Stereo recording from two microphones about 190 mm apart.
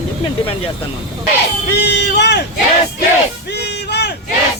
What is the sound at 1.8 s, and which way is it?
Speech, 60° left (ahead or behind).